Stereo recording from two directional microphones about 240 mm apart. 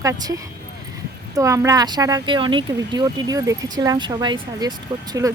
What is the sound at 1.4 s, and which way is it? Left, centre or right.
Speech, centre.